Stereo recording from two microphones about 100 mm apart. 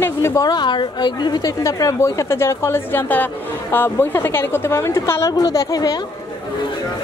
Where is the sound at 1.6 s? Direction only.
30° left (ahead or behind).